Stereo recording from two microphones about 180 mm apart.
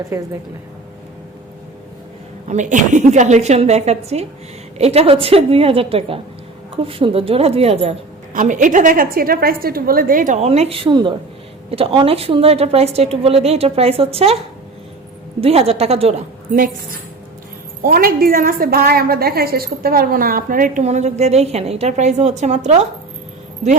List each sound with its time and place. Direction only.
0.1 s a woman's voice: 15° right (ahead or behind)
2.5 s a woman's voice: 45° right (ahead or behind)
8.3 s a woman's voice: 45° right (ahead or behind)
15.4 s a woman's voice: 35° right (ahead or behind)
17.8 s a woman's voice: 55° right (ahead or behind)